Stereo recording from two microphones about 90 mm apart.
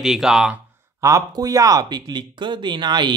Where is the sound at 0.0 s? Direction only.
5° right (ahead or behind).